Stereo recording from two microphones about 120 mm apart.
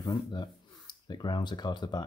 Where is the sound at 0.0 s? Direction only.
40° left (ahead or behind).